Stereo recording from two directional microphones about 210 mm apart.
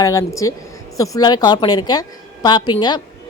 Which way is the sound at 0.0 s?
15° left (ahead or behind).